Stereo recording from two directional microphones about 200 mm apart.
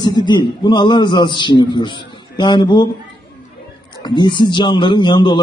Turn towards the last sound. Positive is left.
turn(degrees=20)  # may be behind; listen again after turning